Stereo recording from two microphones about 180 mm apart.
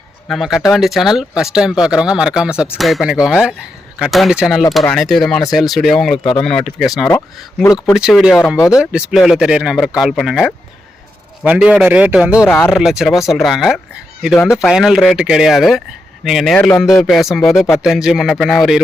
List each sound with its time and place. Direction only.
0.3 s speech: centre (ahead or behind)
7.6 s speech: 15° left (ahead or behind)
7.9 s speech: 5° right (ahead or behind)
8.5 s speech: 15° left (ahead or behind)
8.8 s a man's voice: 5° right (ahead or behind)
12.5 s speech: 10° left (ahead or behind)
12.7 s speech: centre (ahead or behind)